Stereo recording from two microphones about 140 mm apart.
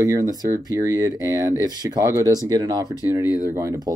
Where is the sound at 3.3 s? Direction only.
20° right (ahead or behind).